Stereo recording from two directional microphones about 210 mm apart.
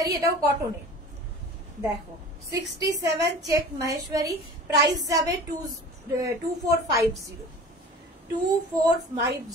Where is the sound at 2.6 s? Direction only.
55° right (ahead or behind).